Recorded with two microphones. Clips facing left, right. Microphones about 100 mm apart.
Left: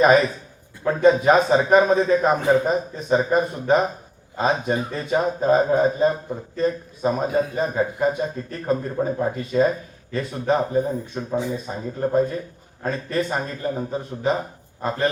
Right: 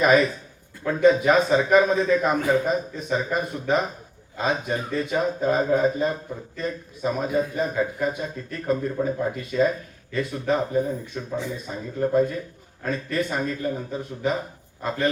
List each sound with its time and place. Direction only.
0.9 s a man's voice: 35° left (ahead or behind)